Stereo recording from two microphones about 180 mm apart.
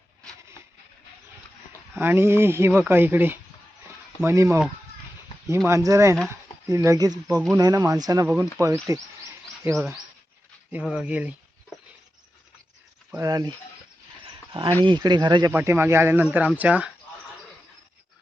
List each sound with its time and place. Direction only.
2.0 s speech: 15° right (ahead or behind)
5.6 s speech: 15° right (ahead or behind)
9.7 s speech: 5° right (ahead or behind)
13.1 s speech: 15° right (ahead or behind)
14.5 s speech: 30° right (ahead or behind)
15.5 s speech: 15° right (ahead or behind)